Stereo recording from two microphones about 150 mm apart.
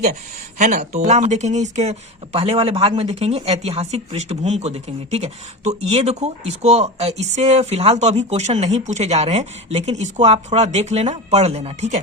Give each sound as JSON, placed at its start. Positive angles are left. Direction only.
{"t": 0.6, "sound": "speech", "side_deg": -50}